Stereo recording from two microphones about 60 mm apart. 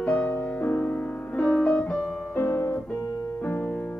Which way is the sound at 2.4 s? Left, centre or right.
Left.